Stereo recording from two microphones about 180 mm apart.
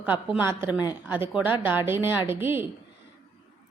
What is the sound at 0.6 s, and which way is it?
Speech, 20° left (ahead or behind).